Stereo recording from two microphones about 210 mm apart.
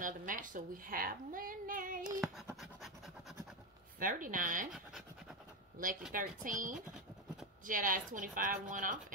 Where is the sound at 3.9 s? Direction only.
40° right (ahead or behind).